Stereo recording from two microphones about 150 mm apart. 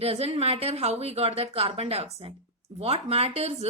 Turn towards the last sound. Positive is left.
turn(degrees=-45)  # may be behind; listen again after turning